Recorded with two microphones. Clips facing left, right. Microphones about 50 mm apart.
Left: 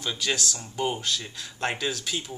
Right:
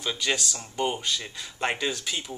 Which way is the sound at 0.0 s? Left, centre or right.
Centre.